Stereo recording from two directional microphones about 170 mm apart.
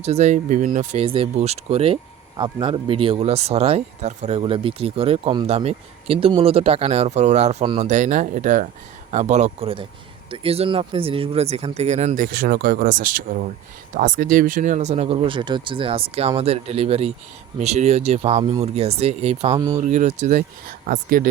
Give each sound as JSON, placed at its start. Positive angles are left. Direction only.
{"t": 0.0, "sound": "speech", "side_deg": -40}
{"t": 7.9, "sound": "speech", "side_deg": -45}
{"t": 19.8, "sound": "speech", "side_deg": -45}